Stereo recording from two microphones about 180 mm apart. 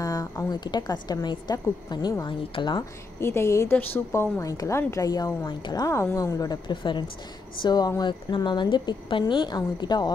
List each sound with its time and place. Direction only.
0.0 s a woman's voice: 20° left (ahead or behind)
3.2 s a woman's voice: 15° left (ahead or behind)